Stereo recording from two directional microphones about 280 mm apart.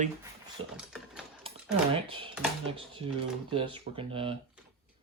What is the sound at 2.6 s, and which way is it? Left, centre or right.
Speech, centre.